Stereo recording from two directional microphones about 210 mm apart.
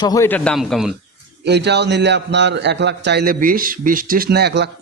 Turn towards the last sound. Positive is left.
turn(degrees=-50)  # may be behind; listen again after turning